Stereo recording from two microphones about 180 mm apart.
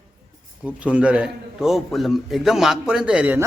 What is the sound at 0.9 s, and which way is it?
A man's voice, 5° right (ahead or behind).